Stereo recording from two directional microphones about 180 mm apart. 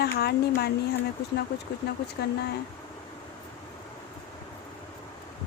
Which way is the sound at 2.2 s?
65° left (ahead or behind).